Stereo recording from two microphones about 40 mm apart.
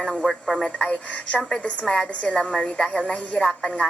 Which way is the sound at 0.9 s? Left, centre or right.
Left.